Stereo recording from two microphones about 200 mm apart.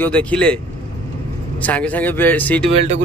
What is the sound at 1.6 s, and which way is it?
Speech, 5° left (ahead or behind).